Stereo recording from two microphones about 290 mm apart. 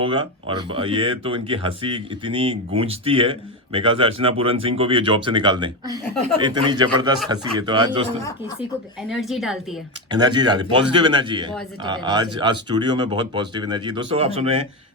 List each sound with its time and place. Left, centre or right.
0.0 s speech: centre
9.0 s a woman's voice: centre
10.1 s speech: centre